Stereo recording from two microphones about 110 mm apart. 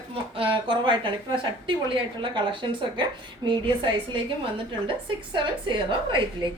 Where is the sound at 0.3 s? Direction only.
50° right (ahead or behind).